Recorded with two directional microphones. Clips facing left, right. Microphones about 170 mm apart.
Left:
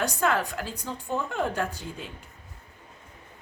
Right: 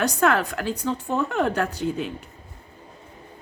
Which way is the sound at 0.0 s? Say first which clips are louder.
Right 5 dB; 70° right (ahead or behind).